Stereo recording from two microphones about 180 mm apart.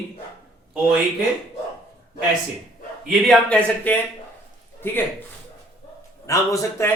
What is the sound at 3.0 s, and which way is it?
Speech, centre (ahead or behind).